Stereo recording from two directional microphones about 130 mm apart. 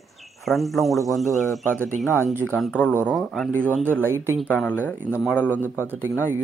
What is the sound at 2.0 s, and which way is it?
Speech, 15° left (ahead or behind).